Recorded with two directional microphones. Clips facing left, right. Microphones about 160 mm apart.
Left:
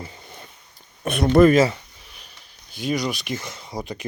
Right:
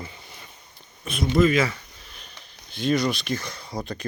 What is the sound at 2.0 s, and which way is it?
Speech, 10° left (ahead or behind).